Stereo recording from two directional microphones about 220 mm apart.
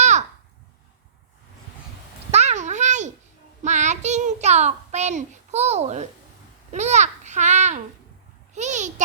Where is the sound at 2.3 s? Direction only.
30° right (ahead or behind).